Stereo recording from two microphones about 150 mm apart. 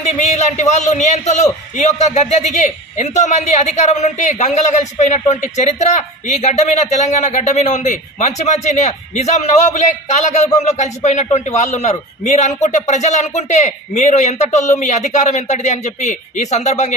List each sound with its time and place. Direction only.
0.0 s a man's voice: 50° left (ahead or behind)